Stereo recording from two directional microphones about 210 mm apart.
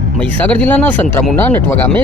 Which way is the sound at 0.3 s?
5° left (ahead or behind).